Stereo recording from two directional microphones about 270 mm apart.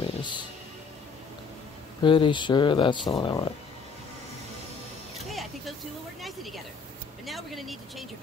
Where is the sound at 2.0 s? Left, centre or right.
Centre.